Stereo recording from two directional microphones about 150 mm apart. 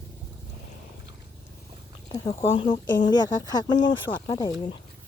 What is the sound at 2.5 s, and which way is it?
Speech, 35° left (ahead or behind).